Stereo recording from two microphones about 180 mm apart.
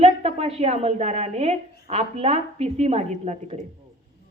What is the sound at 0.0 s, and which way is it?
A woman's voice, 35° right (ahead or behind).